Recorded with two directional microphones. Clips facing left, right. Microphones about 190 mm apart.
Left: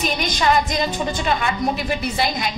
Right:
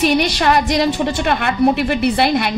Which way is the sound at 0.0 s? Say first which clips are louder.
Right 6 dB; 70° right (ahead or behind).